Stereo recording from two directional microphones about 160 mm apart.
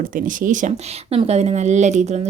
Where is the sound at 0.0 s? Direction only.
55° right (ahead or behind).